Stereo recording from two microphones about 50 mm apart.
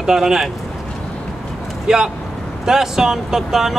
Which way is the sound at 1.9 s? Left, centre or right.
Centre.